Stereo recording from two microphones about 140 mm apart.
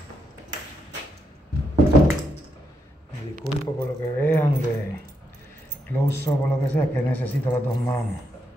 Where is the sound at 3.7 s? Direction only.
15° left (ahead or behind).